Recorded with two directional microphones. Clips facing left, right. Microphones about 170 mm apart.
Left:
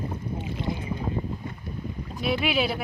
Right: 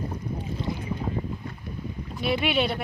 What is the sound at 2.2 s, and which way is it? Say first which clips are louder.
Speech: right 1 dB; centre (ahead or behind).